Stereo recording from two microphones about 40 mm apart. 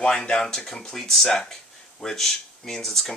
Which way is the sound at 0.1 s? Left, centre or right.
Centre.